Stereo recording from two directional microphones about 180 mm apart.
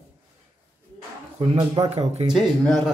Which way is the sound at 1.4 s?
30° right (ahead or behind).